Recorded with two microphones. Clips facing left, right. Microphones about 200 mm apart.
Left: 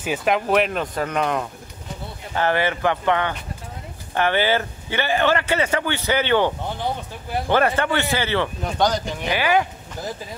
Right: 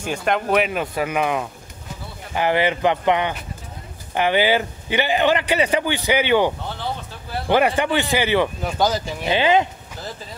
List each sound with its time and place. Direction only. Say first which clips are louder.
0.0 s a man's voice: left 1 dB; 5° left (ahead or behind); by 6.5 s 10° right (ahead or behind)
6.8 s speech: left 2 dB; 15° left (ahead or behind)
7.4 s a man's voice: right 2 dB; 15° right (ahead or behind)
9.3 s speech: right 3 dB; 20° right (ahead or behind)